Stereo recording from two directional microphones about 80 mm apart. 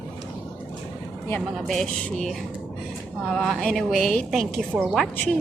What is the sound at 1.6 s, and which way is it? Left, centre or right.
Speech, centre.